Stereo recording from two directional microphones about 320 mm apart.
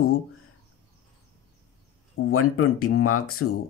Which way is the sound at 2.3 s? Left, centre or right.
Left.